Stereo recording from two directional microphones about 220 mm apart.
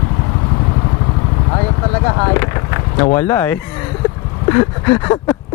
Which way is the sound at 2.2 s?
15° left (ahead or behind).